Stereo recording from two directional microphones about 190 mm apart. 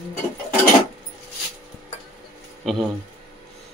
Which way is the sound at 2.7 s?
Centre (ahead or behind).